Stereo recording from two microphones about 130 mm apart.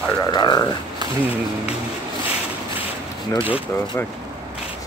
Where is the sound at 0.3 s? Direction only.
35° left (ahead or behind).